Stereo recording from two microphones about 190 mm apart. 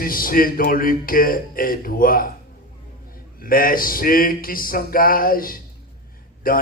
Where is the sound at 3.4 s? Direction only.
50° left (ahead or behind).